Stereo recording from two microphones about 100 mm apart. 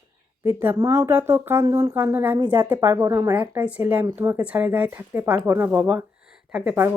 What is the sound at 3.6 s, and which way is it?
Speech, 15° right (ahead or behind).